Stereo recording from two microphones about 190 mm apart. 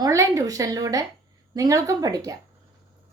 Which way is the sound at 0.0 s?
15° right (ahead or behind).